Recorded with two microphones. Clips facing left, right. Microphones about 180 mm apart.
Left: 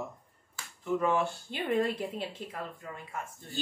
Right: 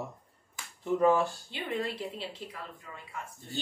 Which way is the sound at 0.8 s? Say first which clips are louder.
Right 3 dB; 35° right (ahead or behind).